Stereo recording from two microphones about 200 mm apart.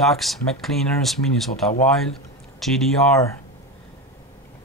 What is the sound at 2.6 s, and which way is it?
Speech, centre (ahead or behind).